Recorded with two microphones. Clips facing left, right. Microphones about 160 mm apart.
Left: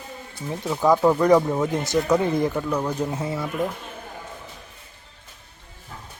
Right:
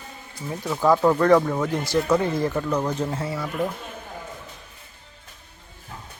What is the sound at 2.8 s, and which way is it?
Speech, 15° left (ahead or behind).